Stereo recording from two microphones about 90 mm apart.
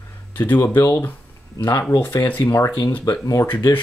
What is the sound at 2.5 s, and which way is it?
Speech, 35° left (ahead or behind).